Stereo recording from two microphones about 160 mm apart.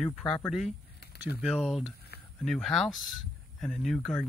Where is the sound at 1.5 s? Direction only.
Centre (ahead or behind).